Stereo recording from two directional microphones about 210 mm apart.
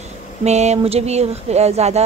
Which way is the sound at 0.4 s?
30° right (ahead or behind).